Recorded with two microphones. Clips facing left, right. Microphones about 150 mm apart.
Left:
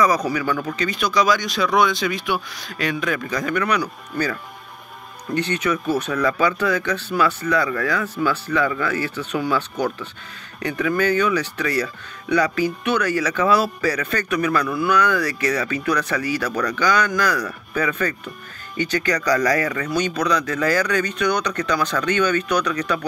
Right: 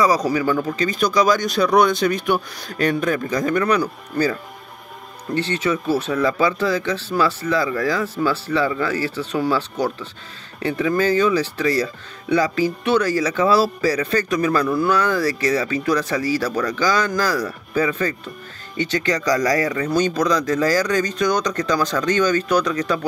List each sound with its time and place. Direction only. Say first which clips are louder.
0.0 s speech: right 2 dB; 30° right (ahead or behind)